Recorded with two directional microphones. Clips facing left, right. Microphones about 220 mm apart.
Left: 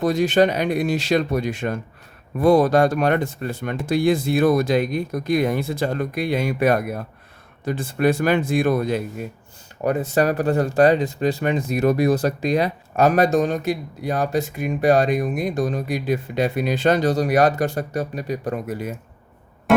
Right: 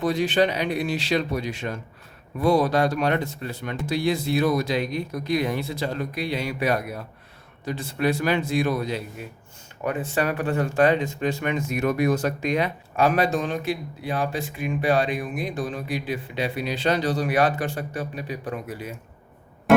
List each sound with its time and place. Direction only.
0.0 s speech: 45° left (ahead or behind)